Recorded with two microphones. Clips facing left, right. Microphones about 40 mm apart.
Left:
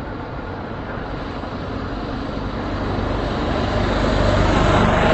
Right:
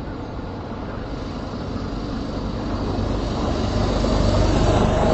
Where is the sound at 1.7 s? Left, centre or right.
Left.